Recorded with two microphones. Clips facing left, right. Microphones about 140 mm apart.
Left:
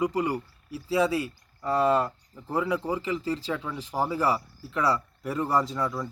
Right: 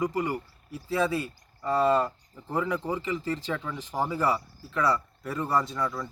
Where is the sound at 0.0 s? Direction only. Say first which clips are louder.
Left 2 dB; 10° left (ahead or behind).